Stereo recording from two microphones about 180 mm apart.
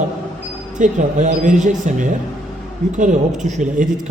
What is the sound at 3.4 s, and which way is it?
Speech, 45° right (ahead or behind).